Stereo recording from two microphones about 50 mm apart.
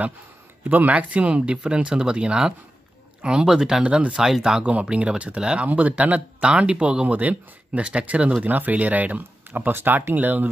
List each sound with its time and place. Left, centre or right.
0.7 s speech: right; by 3.8 s centre
3.8 s speech: right
4.1 s speech: centre; by 9.7 s right
9.7 s speech: right
10.1 s speech: right